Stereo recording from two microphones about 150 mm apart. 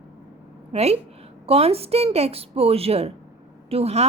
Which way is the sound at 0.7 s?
45° right (ahead or behind).